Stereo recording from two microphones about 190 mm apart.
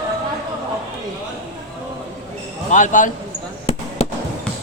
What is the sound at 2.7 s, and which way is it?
Speech, 40° left (ahead or behind).